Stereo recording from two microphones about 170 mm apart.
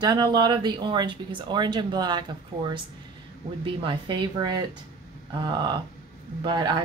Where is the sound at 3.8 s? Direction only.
30° right (ahead or behind).